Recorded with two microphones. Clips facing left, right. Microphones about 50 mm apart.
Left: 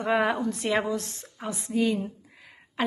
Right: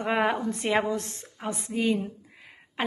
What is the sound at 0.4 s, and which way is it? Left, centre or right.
A woman's voice, right.